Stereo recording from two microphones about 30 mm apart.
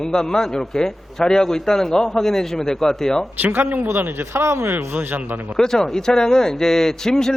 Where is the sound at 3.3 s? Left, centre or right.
Right.